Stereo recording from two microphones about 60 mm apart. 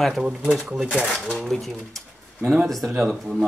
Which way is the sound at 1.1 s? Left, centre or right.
Centre.